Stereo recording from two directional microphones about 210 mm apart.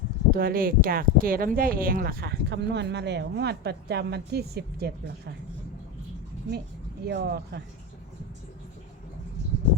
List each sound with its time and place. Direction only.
0.3 s speech: 45° right (ahead or behind)
7.1 s speech: 50° right (ahead or behind)